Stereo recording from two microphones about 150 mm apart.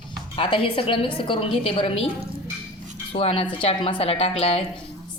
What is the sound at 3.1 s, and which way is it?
A woman's voice, 40° left (ahead or behind).